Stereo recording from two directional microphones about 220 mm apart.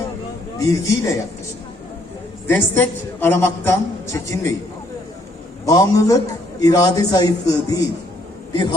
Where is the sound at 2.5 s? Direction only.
10° left (ahead or behind).